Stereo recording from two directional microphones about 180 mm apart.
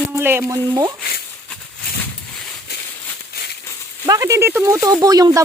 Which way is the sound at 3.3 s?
60° left (ahead or behind).